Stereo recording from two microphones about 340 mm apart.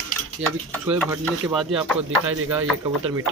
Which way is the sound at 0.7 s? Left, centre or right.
Centre.